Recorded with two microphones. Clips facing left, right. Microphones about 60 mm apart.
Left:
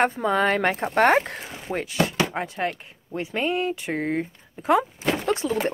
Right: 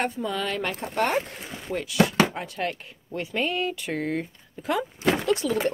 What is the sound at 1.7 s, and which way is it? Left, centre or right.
A woman's voice, left.